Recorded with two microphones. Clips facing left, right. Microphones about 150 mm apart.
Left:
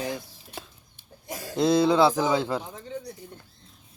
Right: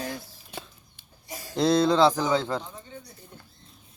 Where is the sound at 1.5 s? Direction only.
5° left (ahead or behind).